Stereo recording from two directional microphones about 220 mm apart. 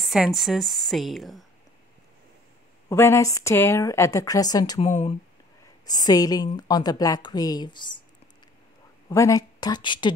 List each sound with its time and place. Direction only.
0.0 s a woman's voice: centre (ahead or behind)
2.9 s a woman's voice: 10° left (ahead or behind)
9.1 s a woman's voice: 15° left (ahead or behind)